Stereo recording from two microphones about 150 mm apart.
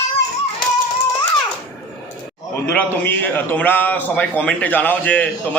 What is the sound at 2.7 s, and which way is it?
A man's voice, 10° left (ahead or behind).